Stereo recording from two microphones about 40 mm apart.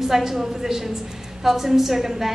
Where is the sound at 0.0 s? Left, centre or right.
Centre.